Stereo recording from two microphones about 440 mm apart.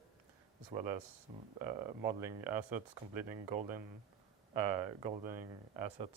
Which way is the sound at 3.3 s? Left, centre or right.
Right.